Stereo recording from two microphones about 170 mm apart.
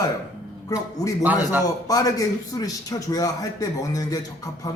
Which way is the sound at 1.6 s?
20° left (ahead or behind).